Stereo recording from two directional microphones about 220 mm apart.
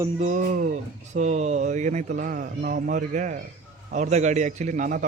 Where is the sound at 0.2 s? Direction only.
35° right (ahead or behind).